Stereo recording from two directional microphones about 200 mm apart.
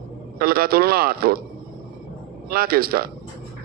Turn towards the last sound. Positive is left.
turn(degrees=-50)  # may be behind; listen again after turning